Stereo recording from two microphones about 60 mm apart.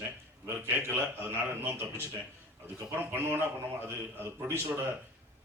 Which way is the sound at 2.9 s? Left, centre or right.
Right.